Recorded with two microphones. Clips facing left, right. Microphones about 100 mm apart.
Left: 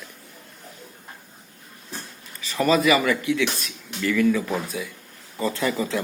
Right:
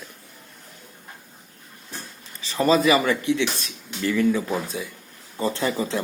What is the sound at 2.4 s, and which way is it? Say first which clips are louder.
Speech: right 1 dB; 30° right (ahead or behind).